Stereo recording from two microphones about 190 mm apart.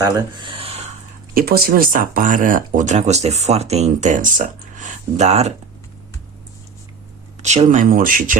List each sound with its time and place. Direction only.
0.0 s a sound: 20° right (ahead or behind)
1.3 s speech: 50° right (ahead or behind); by 5.5 s 35° right (ahead or behind)
7.4 s speech: 35° right (ahead or behind)